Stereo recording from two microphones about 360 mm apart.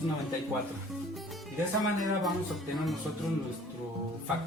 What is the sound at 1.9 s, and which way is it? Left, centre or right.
Speech, centre.